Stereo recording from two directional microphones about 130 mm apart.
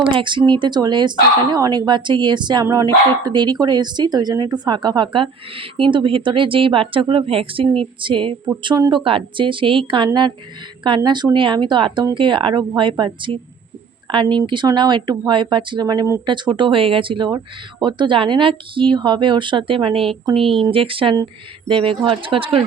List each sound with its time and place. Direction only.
0.1 s speech: 40° right (ahead or behind)